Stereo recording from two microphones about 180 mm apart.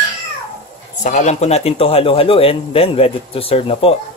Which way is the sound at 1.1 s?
40° left (ahead or behind).